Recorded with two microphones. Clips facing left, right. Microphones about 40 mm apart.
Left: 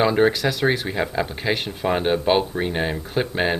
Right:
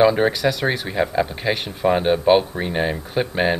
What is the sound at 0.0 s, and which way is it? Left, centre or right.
Speech, centre.